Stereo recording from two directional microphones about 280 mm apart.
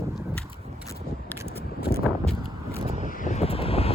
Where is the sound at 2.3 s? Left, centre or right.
Right.